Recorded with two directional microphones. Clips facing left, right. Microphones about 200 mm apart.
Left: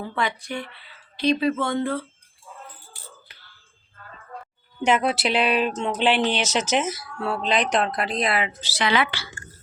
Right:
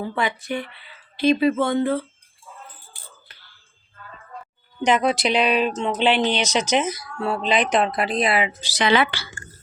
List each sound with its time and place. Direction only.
0.0 s speech: 5° right (ahead or behind)
4.8 s speech: 5° left (ahead or behind)
8.6 s a woman's voice: 20° right (ahead or behind)